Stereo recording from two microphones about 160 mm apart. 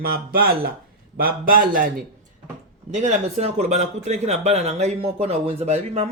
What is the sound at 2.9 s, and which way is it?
A man's voice, 45° right (ahead or behind).